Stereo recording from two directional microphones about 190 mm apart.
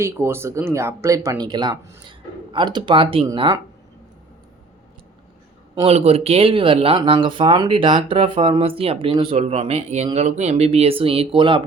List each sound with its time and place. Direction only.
0.0 s speech: 15° right (ahead or behind)
5.8 s speech: 30° right (ahead or behind)